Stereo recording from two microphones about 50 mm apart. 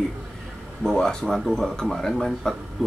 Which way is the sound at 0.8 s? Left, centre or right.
Centre.